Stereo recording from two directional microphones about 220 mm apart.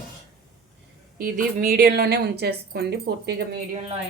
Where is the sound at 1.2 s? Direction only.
40° right (ahead or behind).